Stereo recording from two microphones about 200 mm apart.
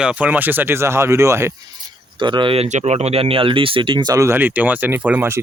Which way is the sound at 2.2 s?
25° right (ahead or behind).